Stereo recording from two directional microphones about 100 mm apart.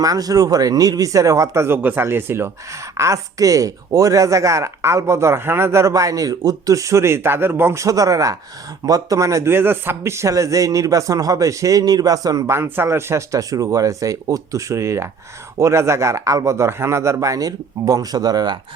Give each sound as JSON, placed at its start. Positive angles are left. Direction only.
{"t": 0.0, "sound": "speech", "side_deg": -40}